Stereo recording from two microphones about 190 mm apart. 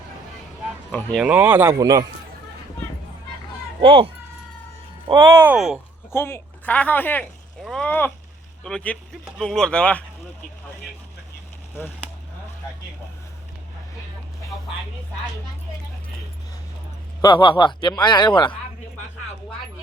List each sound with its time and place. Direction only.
0.9 s speech: 5° left (ahead or behind); by 2.0 s 20° right (ahead or behind)
3.8 s speech: 30° right (ahead or behind)
5.0 s speech: 15° right (ahead or behind)
5.5 s speech: centre (ahead or behind)
6.1 s speech: 15° left (ahead or behind)
17.2 s speech: 25° left (ahead or behind)